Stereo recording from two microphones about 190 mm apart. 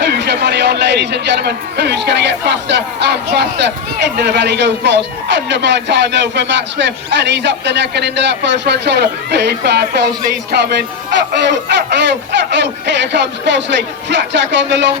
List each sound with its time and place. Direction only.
0.0 s speech: 65° right (ahead or behind)